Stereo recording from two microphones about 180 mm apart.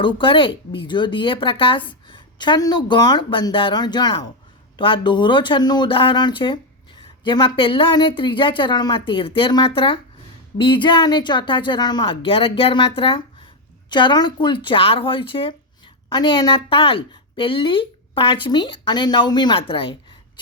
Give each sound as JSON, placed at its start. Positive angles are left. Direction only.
{"t": 0.0, "sound": "speech", "side_deg": 25}